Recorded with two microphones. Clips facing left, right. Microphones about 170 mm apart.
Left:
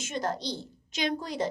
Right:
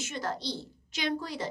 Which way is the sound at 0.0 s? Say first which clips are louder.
Left 3 dB; 20° left (ahead or behind).